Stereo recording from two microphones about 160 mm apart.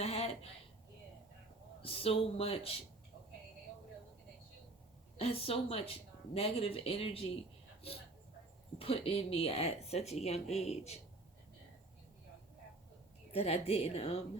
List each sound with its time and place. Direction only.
0.0 s a sound: 40° left (ahead or behind)
1.8 s a woman's voice: 35° left (ahead or behind)
5.1 s a woman's voice: 35° left (ahead or behind)
8.8 s a woman's voice: 35° left (ahead or behind)
13.3 s a woman's voice: 40° left (ahead or behind)